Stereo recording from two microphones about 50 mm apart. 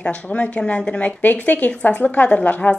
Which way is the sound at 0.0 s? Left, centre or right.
Left.